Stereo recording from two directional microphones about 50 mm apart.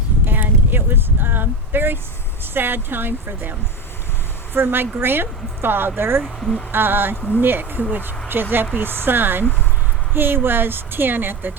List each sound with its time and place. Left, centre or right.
0.3 s a sound: right
2.4 s speech: right
4.5 s speech: right